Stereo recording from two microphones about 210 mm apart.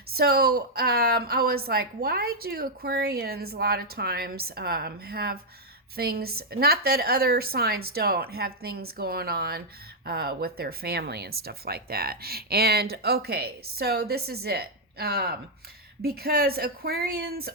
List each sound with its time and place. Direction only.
0.1 s speech: 45° right (ahead or behind)